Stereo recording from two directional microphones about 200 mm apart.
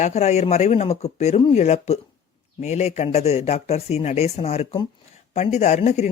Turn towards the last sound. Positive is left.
turn(degrees=35)  # may be behind; listen again after turning